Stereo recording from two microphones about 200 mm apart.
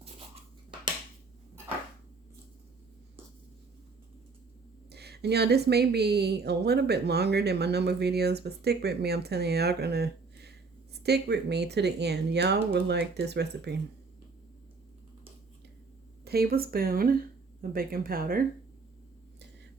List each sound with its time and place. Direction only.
4.9 s speech: 55° right (ahead or behind)
16.2 s speech: 50° right (ahead or behind)